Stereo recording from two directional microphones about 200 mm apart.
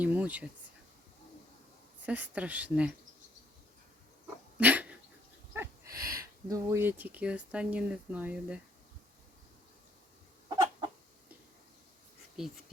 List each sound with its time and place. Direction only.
0.0 s speech: 5° right (ahead or behind)
2.0 s speech: 10° right (ahead or behind)
4.5 s dog: 5° right (ahead or behind)
5.5 s a sound: 15° right (ahead or behind)
6.5 s speech: 10° right (ahead or behind)
10.5 s chicken: 20° right (ahead or behind)
12.4 s speech: 5° right (ahead or behind)